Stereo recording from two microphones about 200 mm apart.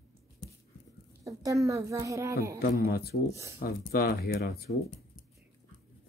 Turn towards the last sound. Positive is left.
turn(degrees=50)  # may be behind; listen again after turning